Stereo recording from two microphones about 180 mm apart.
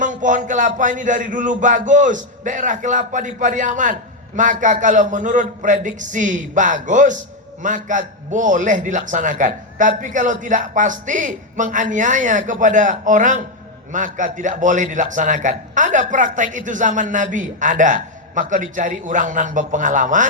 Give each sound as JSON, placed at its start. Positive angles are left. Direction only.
{"t": 0.0, "sound": "a man's voice", "side_deg": -45}